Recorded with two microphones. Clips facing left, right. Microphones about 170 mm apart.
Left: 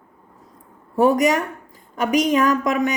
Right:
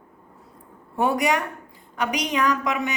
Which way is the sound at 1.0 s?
40° left (ahead or behind).